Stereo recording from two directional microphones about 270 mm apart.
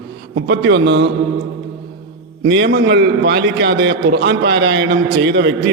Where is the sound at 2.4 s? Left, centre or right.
Right.